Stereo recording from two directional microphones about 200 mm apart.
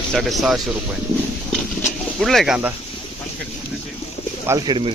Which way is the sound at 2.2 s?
Centre (ahead or behind).